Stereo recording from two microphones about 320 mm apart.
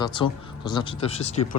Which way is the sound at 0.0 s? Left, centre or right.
Centre.